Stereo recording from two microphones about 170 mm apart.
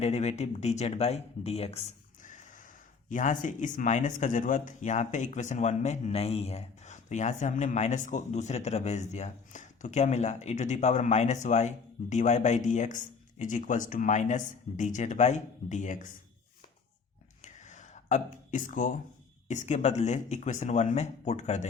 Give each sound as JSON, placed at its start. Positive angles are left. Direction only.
{"t": 0.0, "sound": "speech", "side_deg": 40}
{"t": 2.2, "sound": "speech", "side_deg": 50}
{"t": 17.4, "sound": "a sound", "side_deg": 45}
{"t": 19.5, "sound": "speech", "side_deg": 45}